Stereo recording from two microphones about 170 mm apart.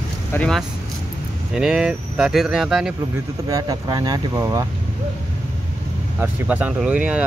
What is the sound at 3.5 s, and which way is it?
Speech, 20° right (ahead or behind).